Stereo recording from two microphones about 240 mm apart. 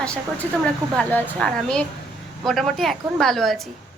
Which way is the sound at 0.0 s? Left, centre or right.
Centre.